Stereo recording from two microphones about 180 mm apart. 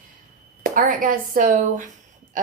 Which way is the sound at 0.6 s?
50° right (ahead or behind).